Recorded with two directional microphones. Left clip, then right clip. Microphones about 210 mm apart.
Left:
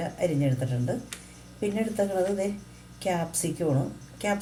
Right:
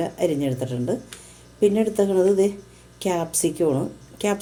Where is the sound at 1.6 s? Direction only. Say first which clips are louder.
Right 8 dB; 45° right (ahead or behind).